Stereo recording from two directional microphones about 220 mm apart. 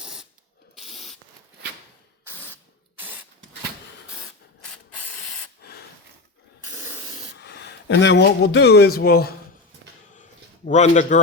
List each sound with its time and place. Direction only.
0.0 s ratchet: 5° right (ahead or behind)
0.8 s a sound: centre (ahead or behind)
2.2 s spray: 10° right (ahead or behind)
4.6 s ratchet: 5° left (ahead or behind)
6.7 s spray: 10° right (ahead or behind)
7.3 s speech: 50° left (ahead or behind)
10.7 s a man's voice: 30° left (ahead or behind)